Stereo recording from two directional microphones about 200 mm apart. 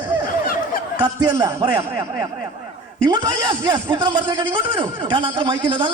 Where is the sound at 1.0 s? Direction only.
20° right (ahead or behind).